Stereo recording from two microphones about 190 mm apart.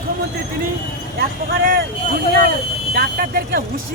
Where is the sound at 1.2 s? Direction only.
50° right (ahead or behind).